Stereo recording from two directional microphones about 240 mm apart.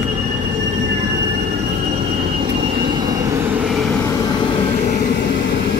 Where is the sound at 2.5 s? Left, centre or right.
Right.